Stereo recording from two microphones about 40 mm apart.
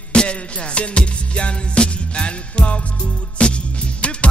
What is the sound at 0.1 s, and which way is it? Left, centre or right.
Music, left.